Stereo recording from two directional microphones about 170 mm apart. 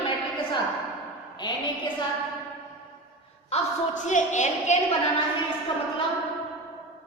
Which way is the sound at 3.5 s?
45° left (ahead or behind).